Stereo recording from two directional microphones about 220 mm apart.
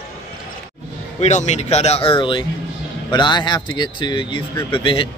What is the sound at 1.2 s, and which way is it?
Speech, 30° left (ahead or behind).